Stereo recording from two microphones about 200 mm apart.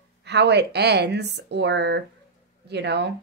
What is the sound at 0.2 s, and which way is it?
Speech, 60° right (ahead or behind).